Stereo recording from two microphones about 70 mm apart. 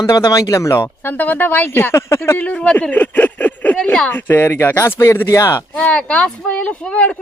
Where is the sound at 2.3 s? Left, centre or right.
Centre.